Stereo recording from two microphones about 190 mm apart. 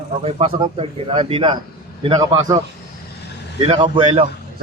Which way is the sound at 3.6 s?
30° right (ahead or behind).